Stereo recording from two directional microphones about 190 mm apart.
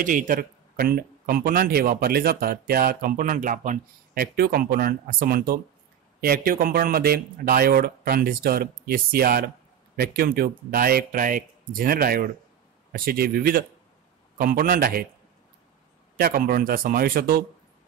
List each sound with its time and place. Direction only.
0.0 s speech: 45° right (ahead or behind)
16.2 s speech: 50° right (ahead or behind)